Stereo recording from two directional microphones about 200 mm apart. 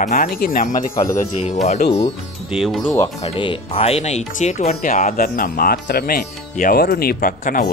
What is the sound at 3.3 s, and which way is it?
Speech, 25° left (ahead or behind).